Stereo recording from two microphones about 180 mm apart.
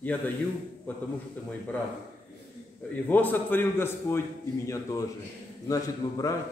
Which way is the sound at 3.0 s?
10° left (ahead or behind).